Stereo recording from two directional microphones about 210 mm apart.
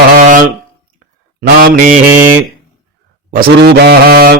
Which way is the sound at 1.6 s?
40° right (ahead or behind).